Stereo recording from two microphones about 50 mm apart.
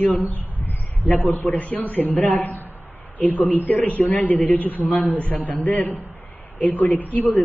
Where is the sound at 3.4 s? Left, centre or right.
Left.